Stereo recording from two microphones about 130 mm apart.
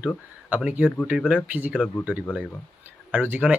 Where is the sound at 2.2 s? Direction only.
10° left (ahead or behind).